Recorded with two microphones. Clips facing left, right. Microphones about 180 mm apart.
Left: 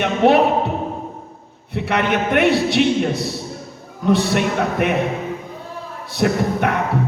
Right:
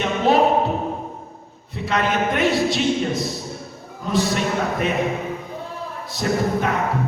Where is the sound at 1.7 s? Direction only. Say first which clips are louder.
Left 2 dB; 65° left (ahead or behind).